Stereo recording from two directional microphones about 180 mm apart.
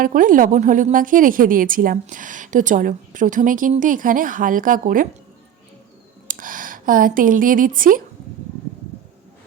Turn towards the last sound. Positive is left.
turn(degrees=-50)  # may be behind; listen again after turning